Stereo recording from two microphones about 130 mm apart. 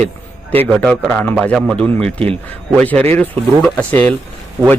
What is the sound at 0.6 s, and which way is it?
A man's voice, 10° left (ahead or behind).